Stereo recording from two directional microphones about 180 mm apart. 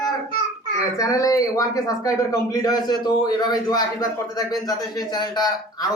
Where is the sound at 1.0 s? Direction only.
20° left (ahead or behind).